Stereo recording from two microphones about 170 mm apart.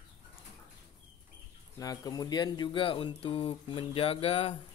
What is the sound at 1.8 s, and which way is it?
Speech, 20° left (ahead or behind).